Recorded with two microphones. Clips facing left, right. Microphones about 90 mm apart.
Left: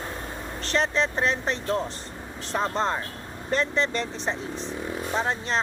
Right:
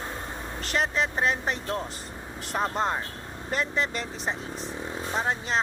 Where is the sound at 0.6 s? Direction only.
5° right (ahead or behind).